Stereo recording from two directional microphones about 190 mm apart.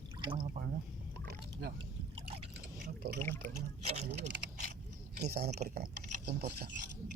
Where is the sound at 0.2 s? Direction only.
25° right (ahead or behind).